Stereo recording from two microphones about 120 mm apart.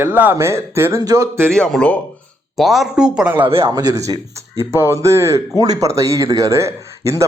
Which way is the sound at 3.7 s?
30° right (ahead or behind).